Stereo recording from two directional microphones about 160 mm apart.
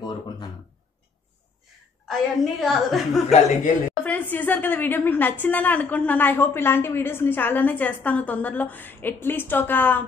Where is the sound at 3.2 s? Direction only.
40° left (ahead or behind).